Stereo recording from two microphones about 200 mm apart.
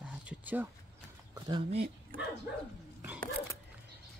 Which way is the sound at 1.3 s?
25° right (ahead or behind).